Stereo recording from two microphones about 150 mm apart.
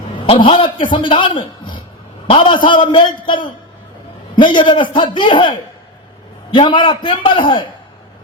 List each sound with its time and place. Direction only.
0.3 s a man's voice: 35° left (ahead or behind)
1.4 s a sound: 35° left (ahead or behind)
2.2 s a man's voice: 35° left (ahead or behind)